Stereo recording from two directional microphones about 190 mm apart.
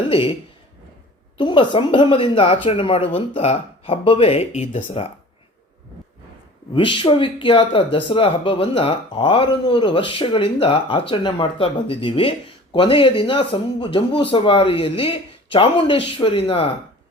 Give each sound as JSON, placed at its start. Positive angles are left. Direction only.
{"t": 0.1, "sound": "speech", "side_deg": 30}
{"t": 1.4, "sound": "speech", "side_deg": 25}
{"t": 6.7, "sound": "speech", "side_deg": 25}